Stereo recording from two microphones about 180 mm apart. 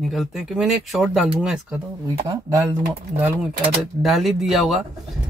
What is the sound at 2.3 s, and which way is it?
Speech, 15° right (ahead or behind).